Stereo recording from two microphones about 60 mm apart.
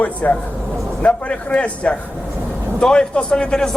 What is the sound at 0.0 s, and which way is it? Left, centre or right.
A man's voice, left.